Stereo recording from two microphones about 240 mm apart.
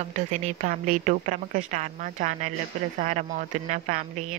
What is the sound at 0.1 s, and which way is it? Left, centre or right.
A man's voice, right.